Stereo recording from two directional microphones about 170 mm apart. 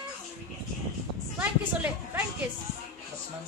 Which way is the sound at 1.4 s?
10° right (ahead or behind).